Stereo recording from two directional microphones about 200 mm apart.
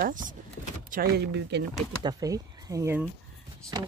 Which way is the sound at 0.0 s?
40° right (ahead or behind).